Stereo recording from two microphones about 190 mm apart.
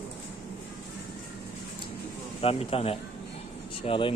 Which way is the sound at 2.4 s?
30° left (ahead or behind).